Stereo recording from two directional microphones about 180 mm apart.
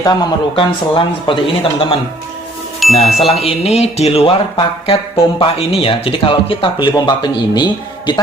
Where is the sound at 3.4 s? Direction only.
35° left (ahead or behind).